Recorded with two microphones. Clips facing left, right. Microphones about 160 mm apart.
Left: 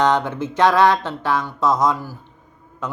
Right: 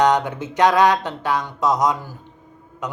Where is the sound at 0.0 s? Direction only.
15° right (ahead or behind).